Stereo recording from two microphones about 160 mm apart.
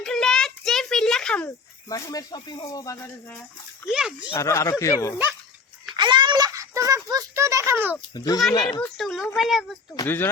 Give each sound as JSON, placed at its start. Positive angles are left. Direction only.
{"t": 0.0, "sound": "a sound", "side_deg": 5}
{"t": 1.9, "sound": "speech", "side_deg": 20}
{"t": 3.9, "sound": "a child's voice", "side_deg": -5}
{"t": 4.4, "sound": "speech", "side_deg": 20}
{"t": 5.9, "sound": "a sound", "side_deg": -30}
{"t": 8.1, "sound": "speech", "side_deg": 25}
{"t": 8.8, "sound": "a child's voice", "side_deg": 0}